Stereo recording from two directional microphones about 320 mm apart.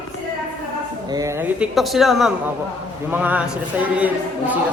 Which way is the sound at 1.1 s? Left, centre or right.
Centre.